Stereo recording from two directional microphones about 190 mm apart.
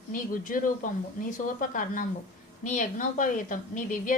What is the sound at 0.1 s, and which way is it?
Speech, 45° left (ahead or behind).